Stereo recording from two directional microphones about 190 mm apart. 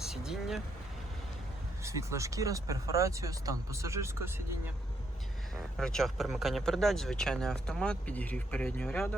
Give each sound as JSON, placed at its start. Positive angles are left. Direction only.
{"t": 0.0, "sound": "speech", "side_deg": 0}
{"t": 1.8, "sound": "speech", "side_deg": -15}
{"t": 5.7, "sound": "speech", "side_deg": 0}